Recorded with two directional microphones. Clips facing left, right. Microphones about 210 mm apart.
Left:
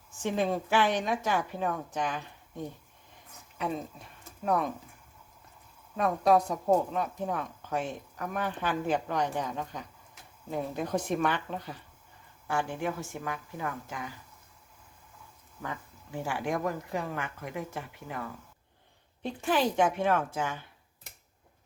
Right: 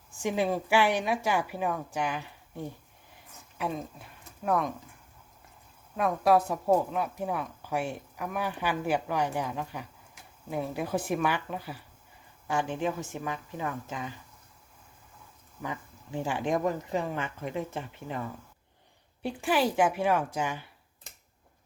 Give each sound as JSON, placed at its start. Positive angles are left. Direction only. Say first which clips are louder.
{"t": 0.2, "sound": "a woman's voice", "louder": "right 1 dB", "side_deg": -10}
{"t": 4.2, "sound": "a sound", "louder": "right 1 dB", "side_deg": 0}
{"t": 6.0, "sound": "a woman's voice", "louder": "even", "side_deg": -5}
{"t": 12.5, "sound": "speech", "louder": "right 2 dB", "side_deg": -20}
{"t": 15.6, "sound": "speech", "louder": "right 2 dB", "side_deg": -15}
{"t": 19.2, "sound": "a woman's voice", "louder": "right 1 dB", "side_deg": -10}